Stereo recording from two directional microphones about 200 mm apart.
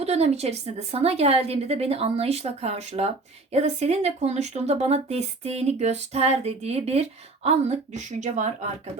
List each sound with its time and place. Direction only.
0.0 s speech: 35° right (ahead or behind)